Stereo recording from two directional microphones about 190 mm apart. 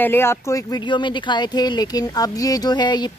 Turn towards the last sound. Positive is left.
turn(degrees=20)  # may be behind; listen again after turning